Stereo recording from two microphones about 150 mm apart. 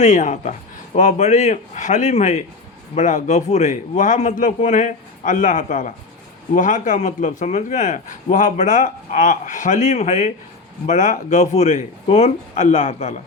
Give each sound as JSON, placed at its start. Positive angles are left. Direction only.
{"t": 0.0, "sound": "a man's voice", "side_deg": 55}